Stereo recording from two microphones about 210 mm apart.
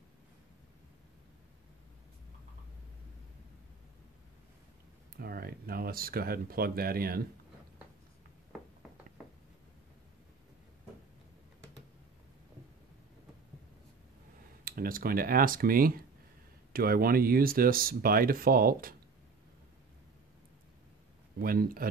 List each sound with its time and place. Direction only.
5.1 s speech: 45° right (ahead or behind)
14.6 s speech: 45° right (ahead or behind)
21.4 s speech: 45° right (ahead or behind)